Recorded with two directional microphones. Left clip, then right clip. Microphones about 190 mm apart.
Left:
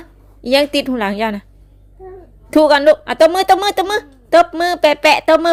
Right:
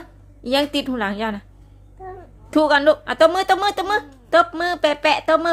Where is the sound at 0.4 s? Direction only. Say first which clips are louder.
Left 6 dB; 30° left (ahead or behind).